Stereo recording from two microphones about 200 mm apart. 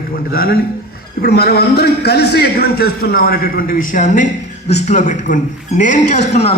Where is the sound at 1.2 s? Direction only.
50° left (ahead or behind).